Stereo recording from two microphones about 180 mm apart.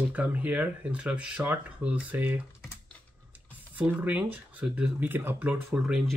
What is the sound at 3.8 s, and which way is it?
Speech, 10° right (ahead or behind).